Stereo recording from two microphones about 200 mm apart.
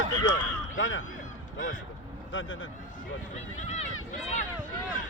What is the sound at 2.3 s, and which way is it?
Speech, 75° left (ahead or behind).